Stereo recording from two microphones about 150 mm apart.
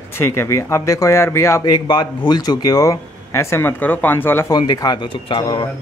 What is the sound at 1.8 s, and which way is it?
Speech, 30° left (ahead or behind).